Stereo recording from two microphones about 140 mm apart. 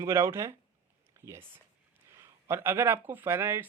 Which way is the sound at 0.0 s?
20° right (ahead or behind).